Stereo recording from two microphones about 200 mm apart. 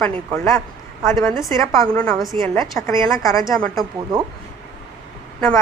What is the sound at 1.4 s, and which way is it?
Speech, 15° left (ahead or behind).